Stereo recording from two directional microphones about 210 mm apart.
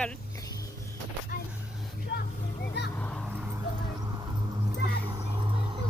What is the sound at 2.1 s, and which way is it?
Vehicle, 55° left (ahead or behind).